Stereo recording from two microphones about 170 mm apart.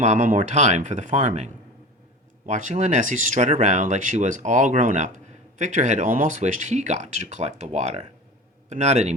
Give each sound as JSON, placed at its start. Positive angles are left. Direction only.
{"t": 0.0, "sound": "speech", "side_deg": -45}
{"t": 2.5, "sound": "a man's voice", "side_deg": -45}